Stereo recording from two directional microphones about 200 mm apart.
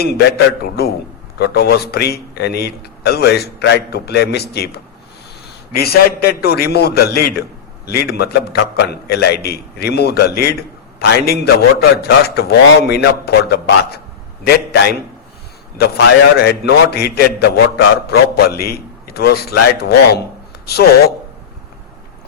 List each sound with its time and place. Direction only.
0.0 s a man's voice: 50° left (ahead or behind)
5.8 s a man's voice: 50° left (ahead or behind)
15.8 s a man's voice: 55° left (ahead or behind)